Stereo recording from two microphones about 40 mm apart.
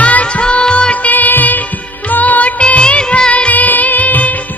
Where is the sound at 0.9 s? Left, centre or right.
Left.